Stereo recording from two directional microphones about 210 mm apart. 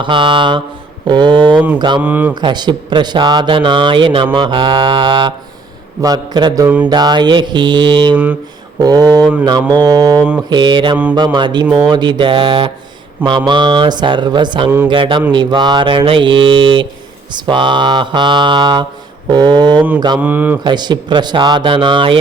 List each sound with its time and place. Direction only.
0.0 s speech: 25° right (ahead or behind)
1.5 s mantra: 10° right (ahead or behind)
2.3 s speech: 20° right (ahead or behind)
6.0 s mantra: 20° right (ahead or behind)
6.8 s speech: 20° right (ahead or behind)
8.1 s mantra: 5° right (ahead or behind)
8.8 s speech: 20° right (ahead or behind)
20.1 s mantra: 10° right (ahead or behind)
20.7 s speech: 20° right (ahead or behind)